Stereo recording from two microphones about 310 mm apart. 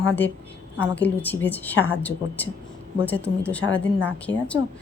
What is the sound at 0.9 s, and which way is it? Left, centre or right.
A woman's voice, centre.